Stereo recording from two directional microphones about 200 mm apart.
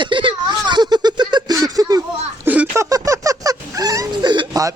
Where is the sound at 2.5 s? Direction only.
10° right (ahead or behind).